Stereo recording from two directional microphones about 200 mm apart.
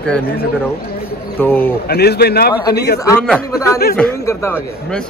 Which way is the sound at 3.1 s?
5° left (ahead or behind).